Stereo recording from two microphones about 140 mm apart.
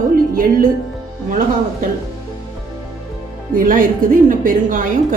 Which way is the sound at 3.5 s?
75° right (ahead or behind).